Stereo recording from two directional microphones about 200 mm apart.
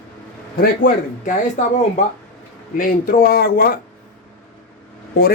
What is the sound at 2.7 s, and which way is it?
Speech, 45° left (ahead or behind).